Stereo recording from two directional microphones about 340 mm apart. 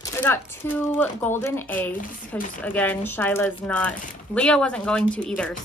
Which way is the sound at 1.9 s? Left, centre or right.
Left.